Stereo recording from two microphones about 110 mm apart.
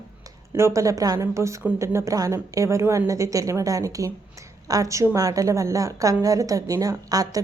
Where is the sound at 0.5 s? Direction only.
25° right (ahead or behind).